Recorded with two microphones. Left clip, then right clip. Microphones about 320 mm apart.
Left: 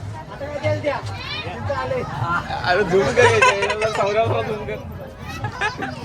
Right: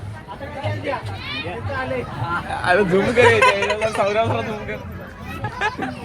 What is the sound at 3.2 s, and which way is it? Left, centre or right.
Speech, centre.